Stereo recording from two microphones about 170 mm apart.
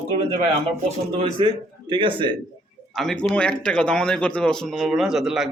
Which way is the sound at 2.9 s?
5° left (ahead or behind).